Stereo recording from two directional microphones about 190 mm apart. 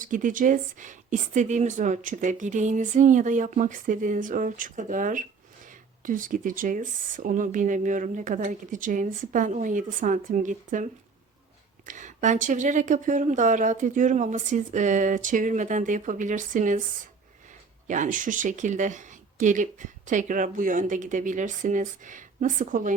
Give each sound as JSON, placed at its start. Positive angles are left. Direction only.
{"t": 0.0, "sound": "speech", "side_deg": -45}
{"t": 11.9, "sound": "speech", "side_deg": -40}